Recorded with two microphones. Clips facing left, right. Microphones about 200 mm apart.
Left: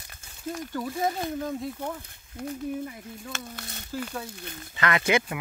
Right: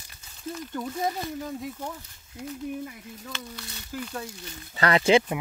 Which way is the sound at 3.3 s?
50° left (ahead or behind).